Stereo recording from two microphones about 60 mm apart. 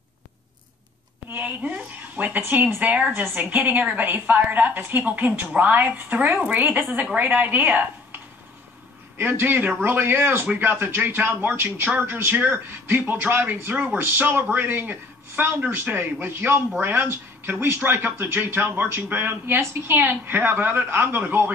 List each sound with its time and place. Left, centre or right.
1.3 s a woman's voice: right
9.2 s speech: right